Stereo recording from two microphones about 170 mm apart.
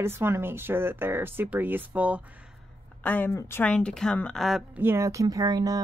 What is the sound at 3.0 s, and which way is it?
A woman's voice, 10° left (ahead or behind).